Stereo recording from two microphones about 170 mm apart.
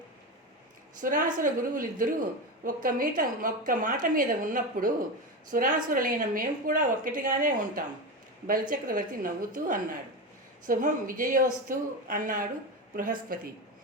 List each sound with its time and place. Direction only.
1.0 s speech: 50° right (ahead or behind)